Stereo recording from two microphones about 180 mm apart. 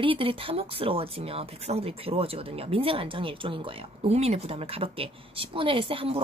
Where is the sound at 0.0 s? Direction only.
30° right (ahead or behind).